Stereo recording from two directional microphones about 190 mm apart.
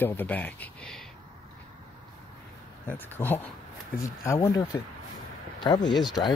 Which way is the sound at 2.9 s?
10° left (ahead or behind).